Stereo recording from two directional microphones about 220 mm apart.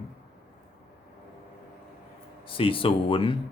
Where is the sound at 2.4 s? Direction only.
25° left (ahead or behind).